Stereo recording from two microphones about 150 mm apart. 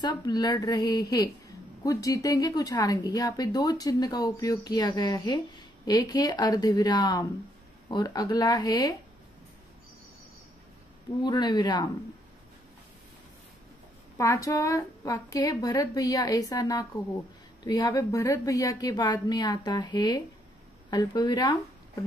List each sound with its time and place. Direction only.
0.0 s speech: 25° left (ahead or behind)
11.2 s speech: 30° left (ahead or behind)
14.1 s speech: 20° left (ahead or behind)